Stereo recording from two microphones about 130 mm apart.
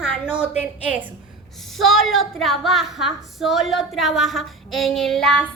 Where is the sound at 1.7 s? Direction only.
Centre (ahead or behind).